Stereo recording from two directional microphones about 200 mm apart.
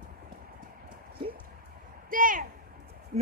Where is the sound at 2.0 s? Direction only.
40° right (ahead or behind).